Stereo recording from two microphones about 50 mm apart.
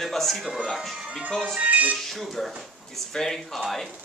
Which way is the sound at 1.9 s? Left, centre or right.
Centre.